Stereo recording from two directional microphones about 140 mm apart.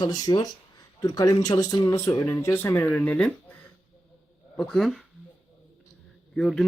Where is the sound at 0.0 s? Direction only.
25° left (ahead or behind); by 5.0 s centre (ahead or behind).